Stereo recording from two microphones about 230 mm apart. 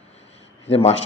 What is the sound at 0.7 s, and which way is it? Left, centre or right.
Speech, left.